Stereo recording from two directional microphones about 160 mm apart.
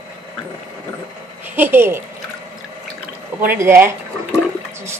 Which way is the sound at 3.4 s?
15° right (ahead or behind).